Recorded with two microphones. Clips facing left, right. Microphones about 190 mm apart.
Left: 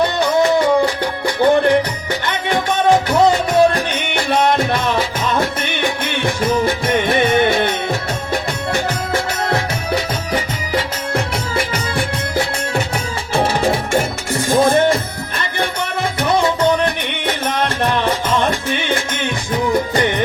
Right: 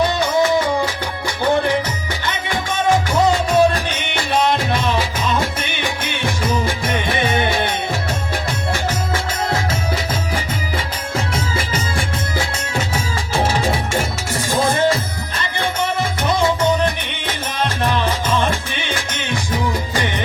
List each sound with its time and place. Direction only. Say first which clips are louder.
0.0 s music: left 2 dB; 60° left (ahead or behind)
10.3 s music: left 4 dB; 65° left (ahead or behind)